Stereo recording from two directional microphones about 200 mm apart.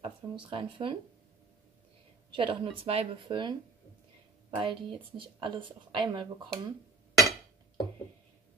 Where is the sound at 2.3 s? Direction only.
25° right (ahead or behind).